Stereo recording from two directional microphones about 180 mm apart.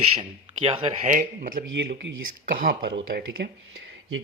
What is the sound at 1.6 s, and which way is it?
Speech, 65° right (ahead or behind).